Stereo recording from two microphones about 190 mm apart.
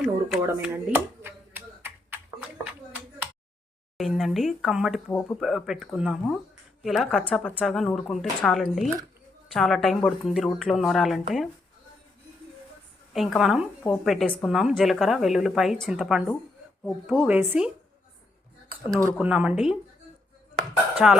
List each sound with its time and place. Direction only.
0.4 s computer keyboard: 10° right (ahead or behind)
3.9 s a woman's voice: centre (ahead or behind)
13.1 s a woman's voice: centre (ahead or behind)
18.9 s a woman's voice: 15° right (ahead or behind)
20.6 s dishes: 5° right (ahead or behind)